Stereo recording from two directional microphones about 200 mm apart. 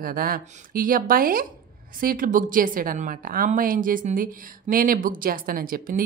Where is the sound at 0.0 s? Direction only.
45° right (ahead or behind).